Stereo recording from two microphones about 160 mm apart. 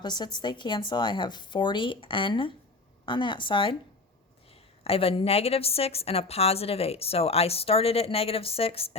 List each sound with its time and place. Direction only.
0.0 s a woman's voice: 25° left (ahead or behind)
4.8 s a woman's voice: 35° left (ahead or behind)